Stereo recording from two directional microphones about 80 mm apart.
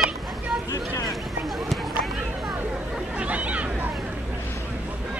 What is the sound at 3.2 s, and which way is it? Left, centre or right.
Chatter, centre.